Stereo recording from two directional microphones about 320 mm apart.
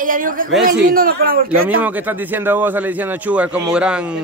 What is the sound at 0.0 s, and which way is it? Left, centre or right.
Speech, right.